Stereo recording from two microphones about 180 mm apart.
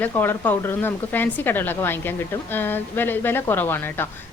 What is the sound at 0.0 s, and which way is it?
Speech, 10° left (ahead or behind).